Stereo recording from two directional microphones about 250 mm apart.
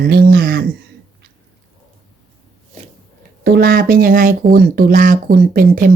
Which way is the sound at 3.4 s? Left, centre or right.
Right.